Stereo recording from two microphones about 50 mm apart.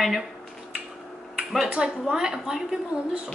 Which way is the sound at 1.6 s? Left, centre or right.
Centre.